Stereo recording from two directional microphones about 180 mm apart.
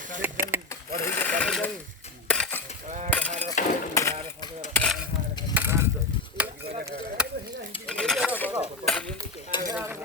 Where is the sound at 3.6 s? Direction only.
45° left (ahead or behind).